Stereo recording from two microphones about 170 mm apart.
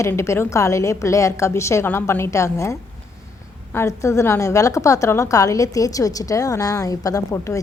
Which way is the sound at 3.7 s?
20° left (ahead or behind).